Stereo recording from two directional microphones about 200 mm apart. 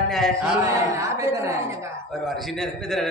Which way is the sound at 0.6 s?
15° right (ahead or behind).